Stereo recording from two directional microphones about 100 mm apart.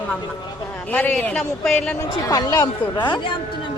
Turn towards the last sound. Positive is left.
turn(degrees=50)  # may be behind; listen again after turning